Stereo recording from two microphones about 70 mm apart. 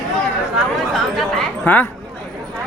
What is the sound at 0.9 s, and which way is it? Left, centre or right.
Chatter, centre.